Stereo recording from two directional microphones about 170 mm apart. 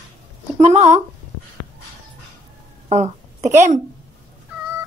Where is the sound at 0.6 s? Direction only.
40° right (ahead or behind).